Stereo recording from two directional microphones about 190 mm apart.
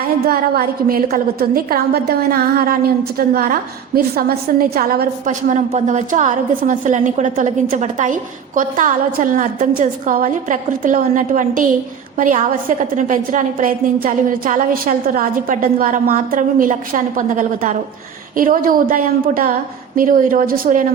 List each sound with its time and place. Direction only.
0.3 s a woman's voice: 50° right (ahead or behind)